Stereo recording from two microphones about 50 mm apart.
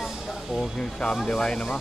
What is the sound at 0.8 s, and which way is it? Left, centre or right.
Speech, centre.